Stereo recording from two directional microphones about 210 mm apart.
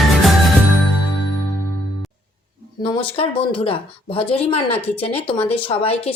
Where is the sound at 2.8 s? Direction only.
25° left (ahead or behind).